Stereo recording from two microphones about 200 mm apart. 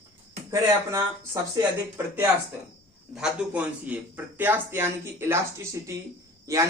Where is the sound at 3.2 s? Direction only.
5° right (ahead or behind).